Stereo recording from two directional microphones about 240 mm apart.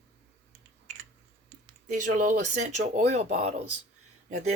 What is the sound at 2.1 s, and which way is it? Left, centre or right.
Speech, right.